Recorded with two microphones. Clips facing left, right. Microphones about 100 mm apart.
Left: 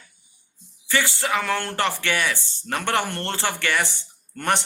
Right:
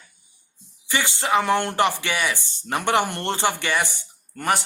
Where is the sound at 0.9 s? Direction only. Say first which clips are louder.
Right 1 dB; 20° right (ahead or behind).